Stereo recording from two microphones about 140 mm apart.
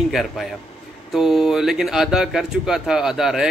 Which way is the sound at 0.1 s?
Centre (ahead or behind).